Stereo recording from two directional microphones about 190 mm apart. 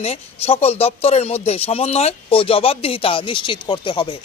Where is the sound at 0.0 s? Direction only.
30° left (ahead or behind).